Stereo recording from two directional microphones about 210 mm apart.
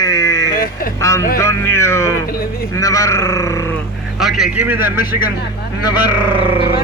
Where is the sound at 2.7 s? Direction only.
15° left (ahead or behind).